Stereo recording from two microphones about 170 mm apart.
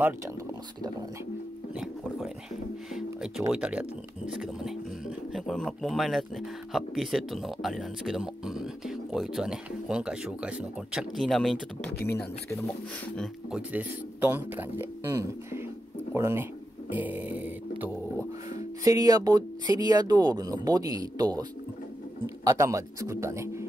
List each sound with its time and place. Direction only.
2.9 s speech: 5° right (ahead or behind)
13.5 s a man's voice: 10° right (ahead or behind)
18.5 s a man's voice: 20° right (ahead or behind)